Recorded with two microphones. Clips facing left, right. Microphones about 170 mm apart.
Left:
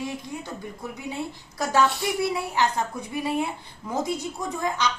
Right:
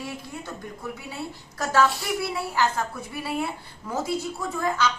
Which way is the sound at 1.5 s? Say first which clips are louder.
Even; 10° left (ahead or behind).